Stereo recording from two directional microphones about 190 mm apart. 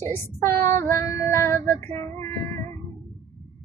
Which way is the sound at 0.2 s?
15° left (ahead or behind).